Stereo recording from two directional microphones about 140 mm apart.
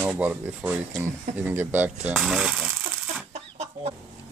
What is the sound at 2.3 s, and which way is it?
Speech, centre (ahead or behind).